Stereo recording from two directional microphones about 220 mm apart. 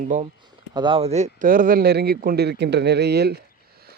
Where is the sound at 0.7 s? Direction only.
20° right (ahead or behind).